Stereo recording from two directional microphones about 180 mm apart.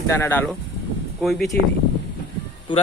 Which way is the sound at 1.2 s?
Centre (ahead or behind).